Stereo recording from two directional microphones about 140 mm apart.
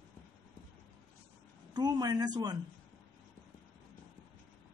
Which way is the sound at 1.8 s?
30° right (ahead or behind).